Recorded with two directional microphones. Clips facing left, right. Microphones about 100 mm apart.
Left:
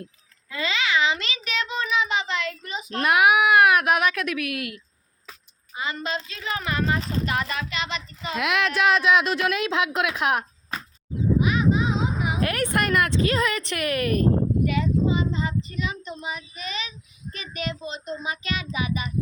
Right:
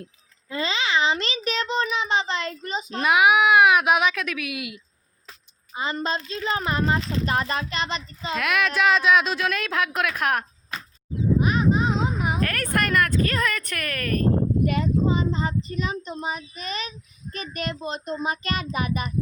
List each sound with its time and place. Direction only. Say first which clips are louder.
0.5 s a sound: even; 30° right (ahead or behind)
1.1 s a child's voice: right 3 dB; 35° right (ahead or behind)
3.0 s speech: even; centre (ahead or behind)
5.7 s a child's voice: right 2 dB; 30° right (ahead or behind)
8.4 s speech: even; 15° left (ahead or behind)
11.3 s a sound: even; 40° right (ahead or behind)
12.4 s speech: left 4 dB; 15° left (ahead or behind)
14.6 s child singing: even; 45° right (ahead or behind)